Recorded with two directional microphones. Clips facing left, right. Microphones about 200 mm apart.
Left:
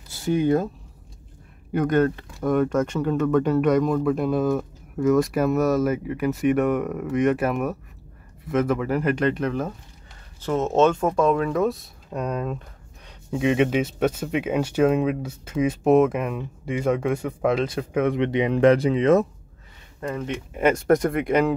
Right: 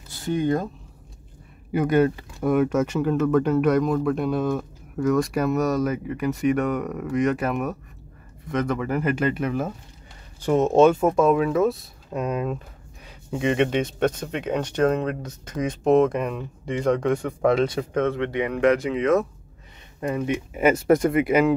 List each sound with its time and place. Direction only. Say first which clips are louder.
0.1 s speech: left 3 dB; 5° left (ahead or behind)
1.7 s speech: right 1 dB; 5° right (ahead or behind)
18.0 s speech: left 5 dB; 15° left (ahead or behind)
20.0 s speech: right 4 dB; 15° right (ahead or behind)